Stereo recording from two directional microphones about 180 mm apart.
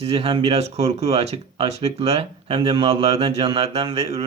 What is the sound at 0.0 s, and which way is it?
Speech, 35° right (ahead or behind).